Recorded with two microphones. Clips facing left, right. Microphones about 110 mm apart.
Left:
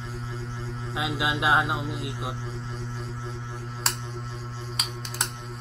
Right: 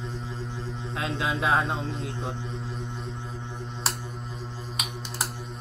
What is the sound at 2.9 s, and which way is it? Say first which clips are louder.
Music: even; centre (ahead or behind).